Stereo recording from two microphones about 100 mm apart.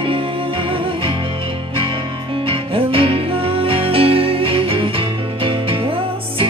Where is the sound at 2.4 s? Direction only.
65° right (ahead or behind).